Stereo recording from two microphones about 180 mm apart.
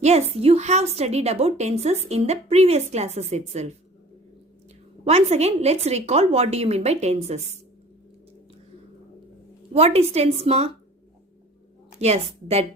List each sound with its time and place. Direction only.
0.0 s a woman's voice: 35° right (ahead or behind)
5.0 s a woman's voice: 35° right (ahead or behind)
9.7 s a woman's voice: 35° right (ahead or behind)
11.9 s a woman's voice: 35° right (ahead or behind)